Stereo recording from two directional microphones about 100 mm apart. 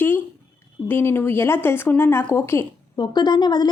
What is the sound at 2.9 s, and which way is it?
Speech, 45° left (ahead or behind).